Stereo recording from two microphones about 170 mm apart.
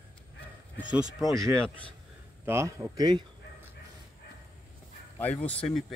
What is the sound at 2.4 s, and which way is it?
Speech, 15° right (ahead or behind).